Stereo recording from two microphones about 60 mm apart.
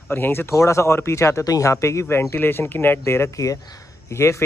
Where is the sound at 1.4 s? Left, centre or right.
Left.